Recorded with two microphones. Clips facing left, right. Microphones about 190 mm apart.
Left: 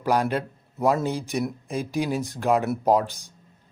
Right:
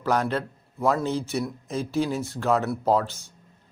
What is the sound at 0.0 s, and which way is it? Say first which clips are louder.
Speech: left 1 dB; 10° left (ahead or behind).